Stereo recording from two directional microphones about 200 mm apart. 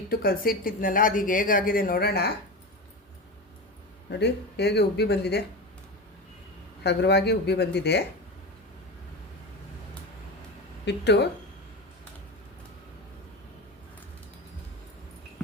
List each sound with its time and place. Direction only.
0.1 s speech: 45° left (ahead or behind)
4.2 s speech: 55° left (ahead or behind)
6.8 s speech: 55° left (ahead or behind)
10.8 s speech: 60° left (ahead or behind)